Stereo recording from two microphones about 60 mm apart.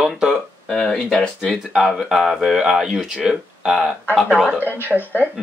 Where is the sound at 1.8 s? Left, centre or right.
Centre.